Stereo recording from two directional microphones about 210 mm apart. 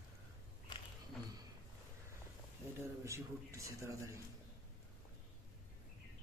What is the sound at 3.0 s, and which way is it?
A man's voice, 15° right (ahead or behind).